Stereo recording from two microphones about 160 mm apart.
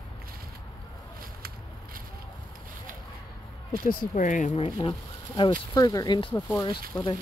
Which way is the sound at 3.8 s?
50° left (ahead or behind).